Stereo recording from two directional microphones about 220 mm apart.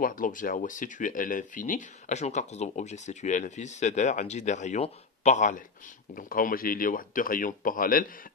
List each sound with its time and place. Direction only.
0.0 s speech: 40° left (ahead or behind)